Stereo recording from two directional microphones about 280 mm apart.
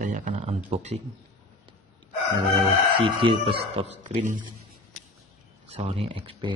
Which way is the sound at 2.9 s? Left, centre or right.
Centre.